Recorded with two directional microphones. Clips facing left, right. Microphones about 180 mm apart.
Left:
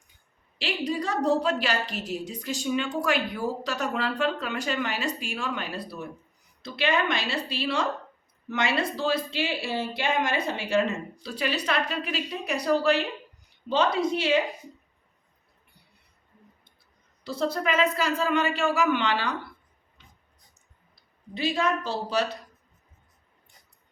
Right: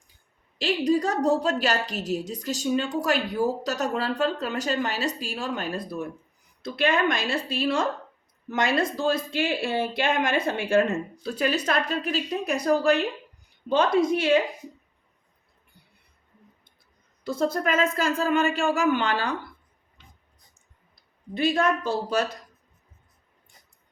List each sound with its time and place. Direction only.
0.6 s a woman's voice: 45° right (ahead or behind)
17.2 s speech: 50° right (ahead or behind)
21.3 s speech: 50° right (ahead or behind)